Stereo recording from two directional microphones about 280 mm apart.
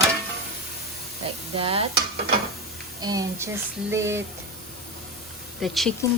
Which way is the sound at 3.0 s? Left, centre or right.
Centre.